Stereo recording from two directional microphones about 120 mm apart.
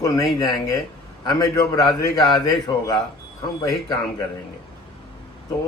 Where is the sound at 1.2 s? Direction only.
30° left (ahead or behind).